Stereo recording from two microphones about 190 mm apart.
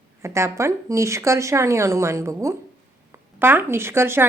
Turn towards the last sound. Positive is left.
turn(degrees=-10)  # may be behind; listen again after turning